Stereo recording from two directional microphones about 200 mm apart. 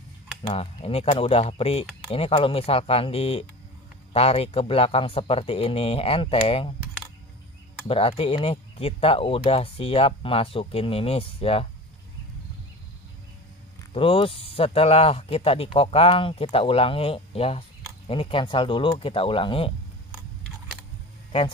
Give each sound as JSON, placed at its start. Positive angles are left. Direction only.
{"t": 0.4, "sound": "speech", "side_deg": 25}
{"t": 7.9, "sound": "speech", "side_deg": 30}
{"t": 13.9, "sound": "speech", "side_deg": 25}